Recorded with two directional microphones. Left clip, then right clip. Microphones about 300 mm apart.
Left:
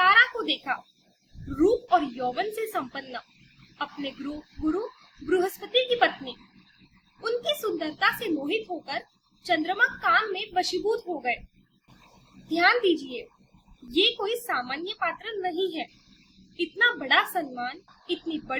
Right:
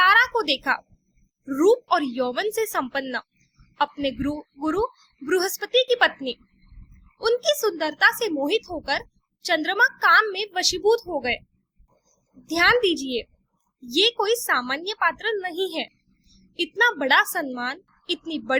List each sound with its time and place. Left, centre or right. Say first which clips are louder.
0.0 s a sound: right 2 dB; right
1.5 s a woman's voice: right 3 dB; right
5.3 s a woman's voice: right 3 dB; right
12.5 s a woman's voice: right 3 dB; right